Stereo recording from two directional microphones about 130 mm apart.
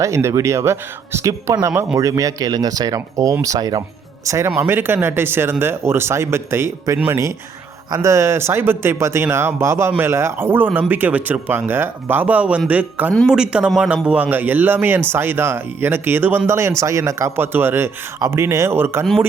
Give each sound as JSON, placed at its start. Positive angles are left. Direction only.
{"t": 0.0, "sound": "speech", "side_deg": -20}